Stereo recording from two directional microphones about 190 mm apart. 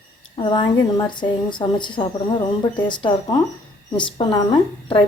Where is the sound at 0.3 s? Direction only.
25° left (ahead or behind).